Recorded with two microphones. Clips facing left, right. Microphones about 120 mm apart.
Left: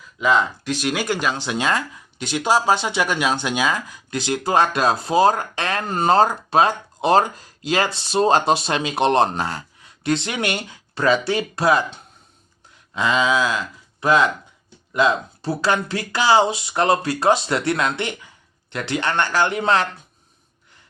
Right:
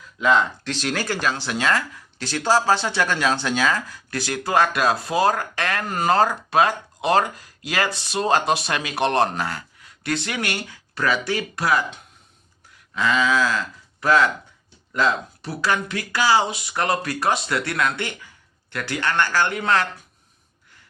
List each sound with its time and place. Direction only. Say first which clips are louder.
0.0 s speech: even; 5° left (ahead or behind); by 14.3 s 20° left (ahead or behind)
15.4 s speech: left 3 dB; 30° left (ahead or behind)